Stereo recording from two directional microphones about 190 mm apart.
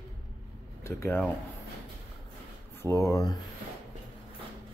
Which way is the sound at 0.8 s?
15° left (ahead or behind).